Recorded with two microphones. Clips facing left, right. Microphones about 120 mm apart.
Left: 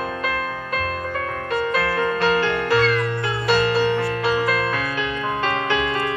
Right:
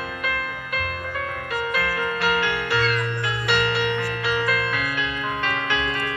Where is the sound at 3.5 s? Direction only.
35° left (ahead or behind).